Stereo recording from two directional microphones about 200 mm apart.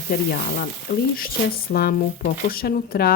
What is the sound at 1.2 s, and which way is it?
Speech, 50° left (ahead or behind).